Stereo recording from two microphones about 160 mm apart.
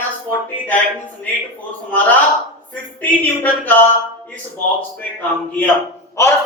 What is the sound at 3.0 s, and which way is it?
Speech, 10° left (ahead or behind).